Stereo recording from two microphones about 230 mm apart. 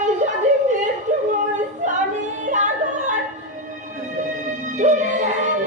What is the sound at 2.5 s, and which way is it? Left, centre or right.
Yodeling, right.